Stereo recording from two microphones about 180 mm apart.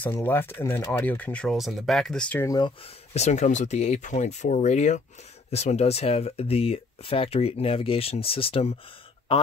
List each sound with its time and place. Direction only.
0.0 s speech: 10° left (ahead or behind); by 8.7 s 30° left (ahead or behind)